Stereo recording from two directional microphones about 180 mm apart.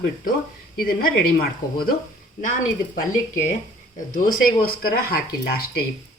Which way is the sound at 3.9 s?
50° left (ahead or behind).